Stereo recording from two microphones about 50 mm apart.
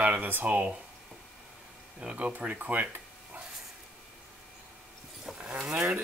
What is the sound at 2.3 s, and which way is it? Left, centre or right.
Speech, right.